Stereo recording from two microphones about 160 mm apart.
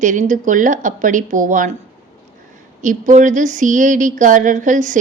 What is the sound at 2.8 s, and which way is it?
Speech, 55° right (ahead or behind).